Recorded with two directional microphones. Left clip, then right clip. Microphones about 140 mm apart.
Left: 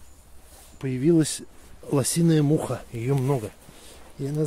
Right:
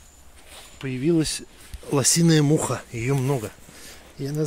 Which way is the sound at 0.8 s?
30° left (ahead or behind).